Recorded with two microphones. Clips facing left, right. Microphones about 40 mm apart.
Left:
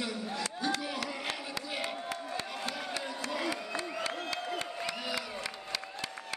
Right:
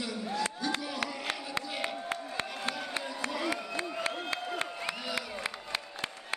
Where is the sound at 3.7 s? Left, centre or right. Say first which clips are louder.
Right 1 dB; right.